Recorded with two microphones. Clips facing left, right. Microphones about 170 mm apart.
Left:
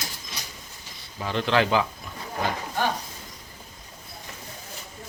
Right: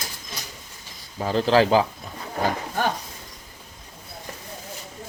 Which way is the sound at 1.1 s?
35° right (ahead or behind).